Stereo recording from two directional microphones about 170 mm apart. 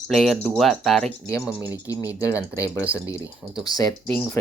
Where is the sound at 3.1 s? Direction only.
20° left (ahead or behind).